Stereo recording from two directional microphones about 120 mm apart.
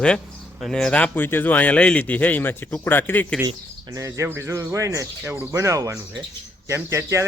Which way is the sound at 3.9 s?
25° right (ahead or behind).